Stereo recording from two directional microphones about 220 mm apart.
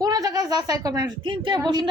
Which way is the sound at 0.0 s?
15° right (ahead or behind).